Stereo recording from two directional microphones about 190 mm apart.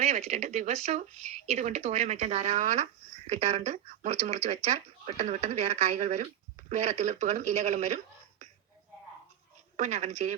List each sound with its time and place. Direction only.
0.0 s speech: 35° right (ahead or behind)
9.7 s speech: 35° right (ahead or behind)